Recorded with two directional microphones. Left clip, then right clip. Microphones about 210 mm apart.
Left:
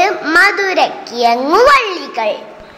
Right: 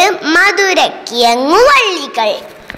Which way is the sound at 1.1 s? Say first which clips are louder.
Right 3 dB; 35° right (ahead or behind).